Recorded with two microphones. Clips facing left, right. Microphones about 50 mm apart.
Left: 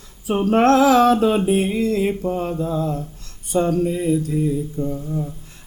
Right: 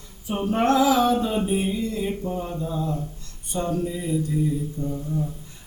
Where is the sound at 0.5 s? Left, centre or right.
Left.